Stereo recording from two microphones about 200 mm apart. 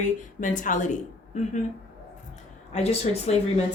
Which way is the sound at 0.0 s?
40° left (ahead or behind).